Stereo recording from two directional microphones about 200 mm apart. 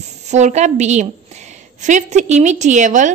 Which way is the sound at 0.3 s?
35° right (ahead or behind).